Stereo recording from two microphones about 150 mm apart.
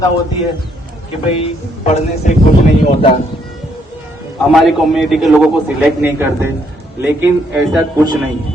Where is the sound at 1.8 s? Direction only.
50° left (ahead or behind).